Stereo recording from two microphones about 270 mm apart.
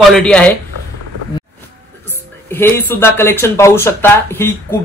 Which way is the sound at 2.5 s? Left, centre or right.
Centre.